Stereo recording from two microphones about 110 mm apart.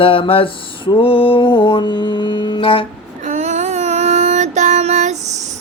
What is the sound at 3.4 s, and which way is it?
Child singing, 90° right.